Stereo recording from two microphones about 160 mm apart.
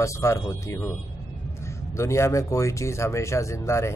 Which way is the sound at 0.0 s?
20° left (ahead or behind).